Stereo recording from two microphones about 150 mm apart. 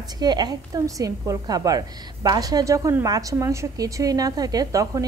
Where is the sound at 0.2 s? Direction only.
25° right (ahead or behind).